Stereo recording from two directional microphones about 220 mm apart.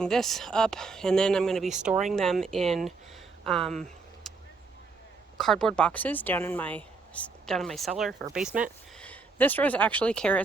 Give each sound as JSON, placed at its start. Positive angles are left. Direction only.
{"t": 0.0, "sound": "a woman's voice", "side_deg": 0}
{"t": 3.4, "sound": "a sound", "side_deg": 0}
{"t": 5.4, "sound": "a woman's voice", "side_deg": 0}
{"t": 9.0, "sound": "speech", "side_deg": 5}